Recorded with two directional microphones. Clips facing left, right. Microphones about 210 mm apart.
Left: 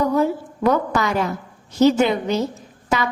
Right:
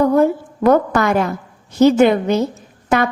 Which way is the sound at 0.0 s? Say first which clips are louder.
Right 5 dB; 50° right (ahead or behind).